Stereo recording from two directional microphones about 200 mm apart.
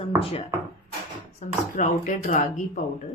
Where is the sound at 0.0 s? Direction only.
30° left (ahead or behind).